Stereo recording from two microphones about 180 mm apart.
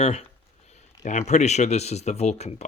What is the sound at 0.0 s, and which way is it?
Speech, 35° left (ahead or behind).